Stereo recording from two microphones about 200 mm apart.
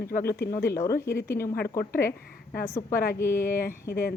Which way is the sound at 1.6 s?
50° left (ahead or behind).